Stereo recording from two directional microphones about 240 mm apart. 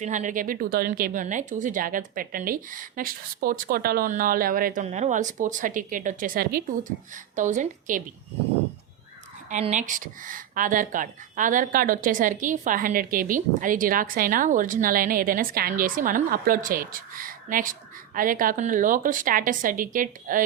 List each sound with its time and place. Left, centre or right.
0.0 s speech: right
9.5 s speech: right